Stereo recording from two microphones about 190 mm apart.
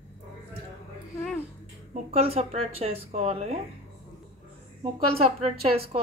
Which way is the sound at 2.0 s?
30° right (ahead or behind).